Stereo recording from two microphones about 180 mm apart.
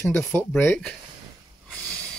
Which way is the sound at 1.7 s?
5° left (ahead or behind).